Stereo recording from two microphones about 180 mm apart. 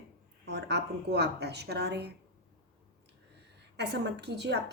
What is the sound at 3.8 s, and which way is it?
Speech, 70° right (ahead or behind).